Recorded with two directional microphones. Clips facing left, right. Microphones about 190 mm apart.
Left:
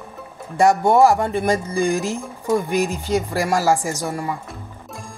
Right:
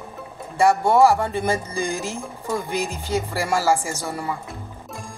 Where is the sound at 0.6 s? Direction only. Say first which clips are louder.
Left 2 dB; 15° left (ahead or behind).